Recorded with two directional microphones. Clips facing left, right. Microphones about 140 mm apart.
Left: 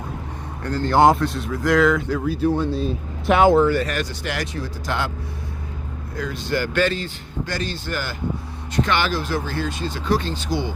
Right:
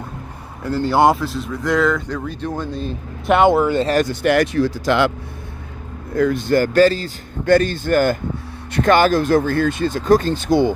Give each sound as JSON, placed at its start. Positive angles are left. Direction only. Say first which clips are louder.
{"t": 0.6, "sound": "speech", "louder": "right 1 dB", "side_deg": -5}
{"t": 3.6, "sound": "speech", "louder": "right 1 dB", "side_deg": -20}
{"t": 4.0, "sound": "speech", "louder": "right 11 dB", "side_deg": -55}
{"t": 6.1, "sound": "speech", "louder": "right 9 dB", "side_deg": -55}
{"t": 7.4, "sound": "speech", "louder": "right 14 dB", "side_deg": -55}